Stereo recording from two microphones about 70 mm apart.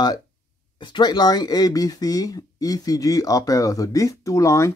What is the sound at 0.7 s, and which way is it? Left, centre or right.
Speech, left.